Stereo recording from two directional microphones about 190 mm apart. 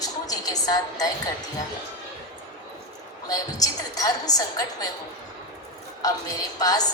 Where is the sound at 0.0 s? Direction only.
20° left (ahead or behind).